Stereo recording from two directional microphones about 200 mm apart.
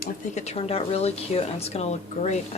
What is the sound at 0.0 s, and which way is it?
A woman's voice, 35° left (ahead or behind).